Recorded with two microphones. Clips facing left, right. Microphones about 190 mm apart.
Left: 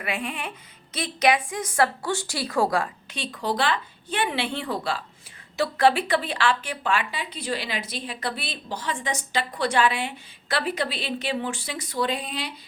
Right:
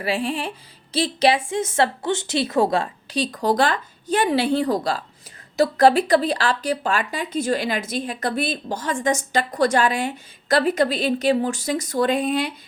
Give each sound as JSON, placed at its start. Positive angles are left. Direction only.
{"t": 0.0, "sound": "a woman's voice", "side_deg": -30}
{"t": 3.2, "sound": "speech", "side_deg": -40}